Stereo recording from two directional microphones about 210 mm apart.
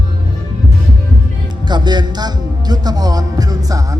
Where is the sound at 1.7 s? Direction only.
20° right (ahead or behind).